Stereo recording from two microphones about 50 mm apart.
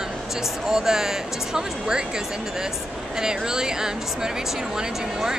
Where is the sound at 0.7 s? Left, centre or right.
Centre.